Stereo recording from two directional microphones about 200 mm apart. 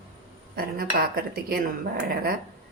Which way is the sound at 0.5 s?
50° right (ahead or behind).